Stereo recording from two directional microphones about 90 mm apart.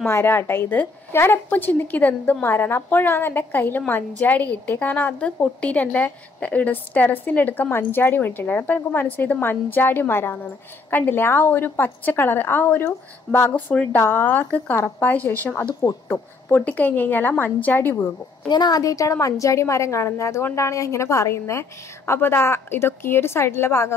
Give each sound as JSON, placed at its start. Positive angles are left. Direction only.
{"t": 0.0, "sound": "a woman's voice", "side_deg": 25}
{"t": 18.5, "sound": "a woman's voice", "side_deg": 50}